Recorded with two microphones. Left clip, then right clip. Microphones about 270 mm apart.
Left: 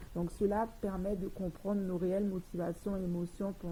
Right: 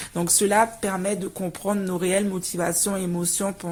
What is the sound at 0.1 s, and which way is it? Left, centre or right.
Speech, right.